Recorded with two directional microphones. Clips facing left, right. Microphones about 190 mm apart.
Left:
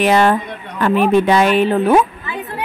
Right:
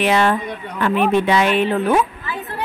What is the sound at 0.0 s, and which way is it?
A woman's voice, 45° left (ahead or behind).